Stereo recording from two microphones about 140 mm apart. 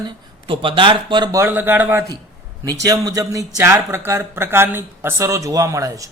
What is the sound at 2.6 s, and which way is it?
A man's voice, 25° right (ahead or behind).